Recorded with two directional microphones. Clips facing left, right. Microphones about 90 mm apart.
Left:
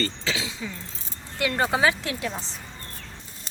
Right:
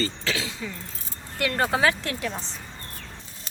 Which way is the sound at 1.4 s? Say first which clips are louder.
Even; 15° left (ahead or behind).